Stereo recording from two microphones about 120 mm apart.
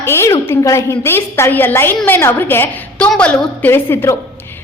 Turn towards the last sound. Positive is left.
turn(degrees=20)  # may be behind; listen again after turning